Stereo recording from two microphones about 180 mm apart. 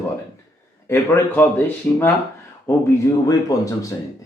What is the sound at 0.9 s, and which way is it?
Speech, 15° left (ahead or behind).